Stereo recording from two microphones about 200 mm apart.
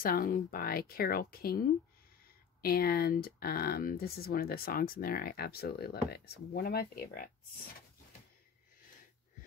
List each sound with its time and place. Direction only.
0.0 s speech: 45° left (ahead or behind)